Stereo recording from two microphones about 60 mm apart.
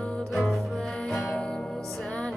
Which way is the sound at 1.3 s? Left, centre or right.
Centre.